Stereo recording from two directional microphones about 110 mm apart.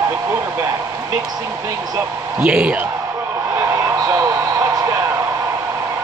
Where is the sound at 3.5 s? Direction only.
25° right (ahead or behind).